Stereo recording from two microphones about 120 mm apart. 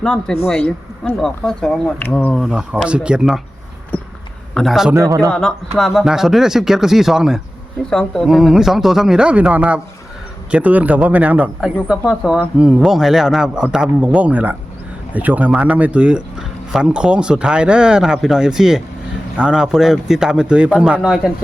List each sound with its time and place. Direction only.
0.0 s a man's voice: 5° left (ahead or behind)
2.3 s speech: 5° right (ahead or behind)
3.9 s a sound: 15° left (ahead or behind)
4.5 s speech: centre (ahead or behind)
4.9 s a man's voice: 30° right (ahead or behind)
5.3 s speech: 5° left (ahead or behind)